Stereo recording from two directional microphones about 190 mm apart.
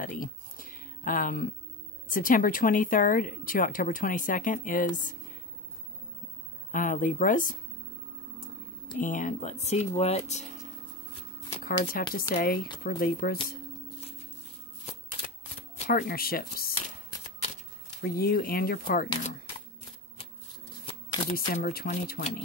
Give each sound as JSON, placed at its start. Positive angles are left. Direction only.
{"t": 0.0, "sound": "a sound", "side_deg": 45}
{"t": 2.0, "sound": "a woman's voice", "side_deg": 45}
{"t": 6.7, "sound": "a woman's voice", "side_deg": 45}
{"t": 8.9, "sound": "speech", "side_deg": 45}
{"t": 11.9, "sound": "a woman's voice", "side_deg": 50}
{"t": 15.9, "sound": "a woman's voice", "side_deg": 50}
{"t": 18.0, "sound": "a woman's voice", "side_deg": 50}
{"t": 20.8, "sound": "shuffling cards", "side_deg": 30}
{"t": 21.3, "sound": "a woman's voice", "side_deg": 45}